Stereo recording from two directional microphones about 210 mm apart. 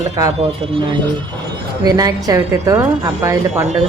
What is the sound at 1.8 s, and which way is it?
A woman's voice, 20° right (ahead or behind).